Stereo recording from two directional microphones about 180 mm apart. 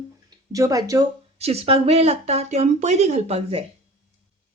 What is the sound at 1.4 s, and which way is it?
Speech, 35° right (ahead or behind).